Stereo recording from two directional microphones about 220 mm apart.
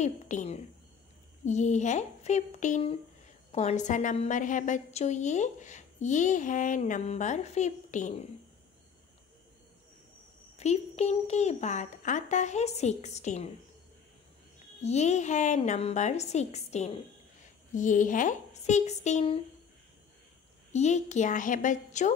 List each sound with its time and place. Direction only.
0.0 s a woman's voice: 30° left (ahead or behind)
10.6 s a woman's voice: 30° left (ahead or behind)
14.8 s a woman's voice: 30° left (ahead or behind)
20.7 s a woman's voice: 30° left (ahead or behind)